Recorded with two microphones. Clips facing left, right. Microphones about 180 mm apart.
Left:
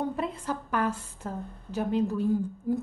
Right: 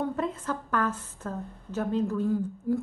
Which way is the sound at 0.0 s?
15° left (ahead or behind).